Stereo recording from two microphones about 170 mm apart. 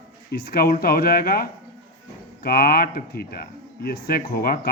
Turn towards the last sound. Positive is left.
turn(degrees=60)  # may be behind; listen again after turning